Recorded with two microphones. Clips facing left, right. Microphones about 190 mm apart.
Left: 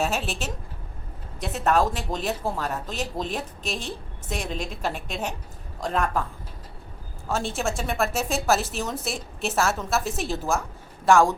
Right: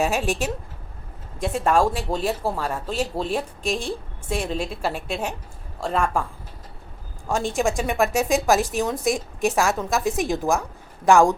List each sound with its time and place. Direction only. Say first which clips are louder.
0.0 s speech: right 4 dB; 15° right (ahead or behind)
1.5 s speech: right 2 dB; 10° right (ahead or behind)
7.3 s speech: right 4 dB; 15° right (ahead or behind)